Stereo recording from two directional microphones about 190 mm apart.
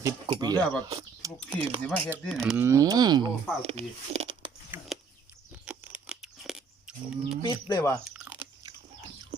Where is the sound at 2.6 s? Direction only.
15° right (ahead or behind).